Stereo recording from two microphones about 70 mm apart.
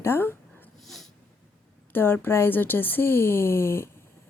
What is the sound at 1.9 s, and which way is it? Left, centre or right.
A woman's voice, left.